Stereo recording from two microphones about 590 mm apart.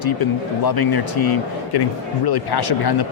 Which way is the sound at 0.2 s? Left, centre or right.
Left.